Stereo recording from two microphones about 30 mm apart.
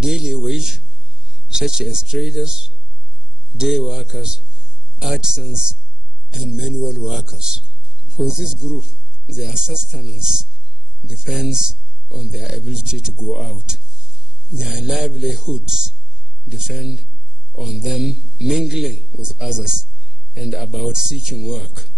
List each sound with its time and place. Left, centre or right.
0.1 s a sound: right
1.5 s a man's voice: right
6.9 s a man's voice: centre